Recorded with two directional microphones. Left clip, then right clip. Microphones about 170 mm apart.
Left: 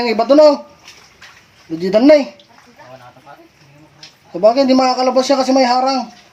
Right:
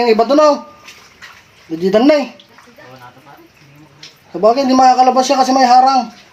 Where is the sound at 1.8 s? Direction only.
15° left (ahead or behind).